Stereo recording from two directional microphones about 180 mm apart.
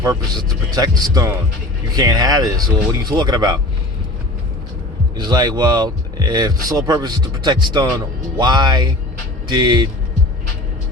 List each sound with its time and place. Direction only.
0.0 s speech: 20° right (ahead or behind)
5.1 s speech: 25° right (ahead or behind)